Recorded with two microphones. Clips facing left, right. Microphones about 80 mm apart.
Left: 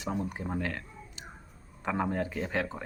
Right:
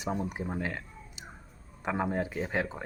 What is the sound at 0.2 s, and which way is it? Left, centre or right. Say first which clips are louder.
Speech: even; centre.